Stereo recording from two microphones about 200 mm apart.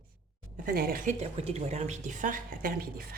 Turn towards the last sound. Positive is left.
turn(degrees=-45)  # may be behind; listen again after turning